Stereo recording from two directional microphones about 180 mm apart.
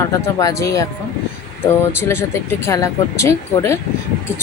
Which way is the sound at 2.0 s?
15° left (ahead or behind).